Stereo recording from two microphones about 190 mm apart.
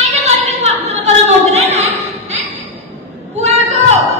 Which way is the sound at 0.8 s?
35° right (ahead or behind).